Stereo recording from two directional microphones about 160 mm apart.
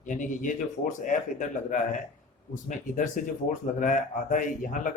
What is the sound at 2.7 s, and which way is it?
A man's voice, 55° left (ahead or behind).